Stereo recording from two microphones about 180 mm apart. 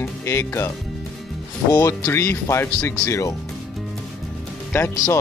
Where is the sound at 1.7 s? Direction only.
15° left (ahead or behind).